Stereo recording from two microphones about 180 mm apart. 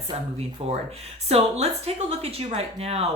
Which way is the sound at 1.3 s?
35° right (ahead or behind).